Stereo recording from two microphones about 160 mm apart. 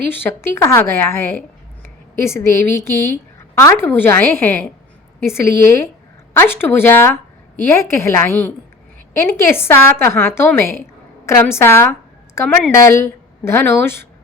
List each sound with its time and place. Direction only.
0.1 s a woman's voice: 15° left (ahead or behind)